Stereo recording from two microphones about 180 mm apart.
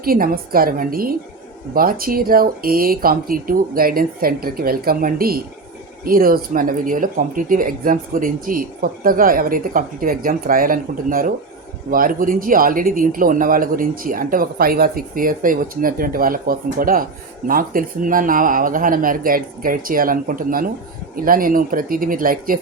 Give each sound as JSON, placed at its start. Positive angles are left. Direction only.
{"t": 0.0, "sound": "speech", "side_deg": -55}